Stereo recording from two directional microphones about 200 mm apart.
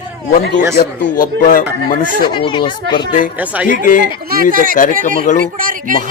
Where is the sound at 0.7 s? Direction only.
40° left (ahead or behind).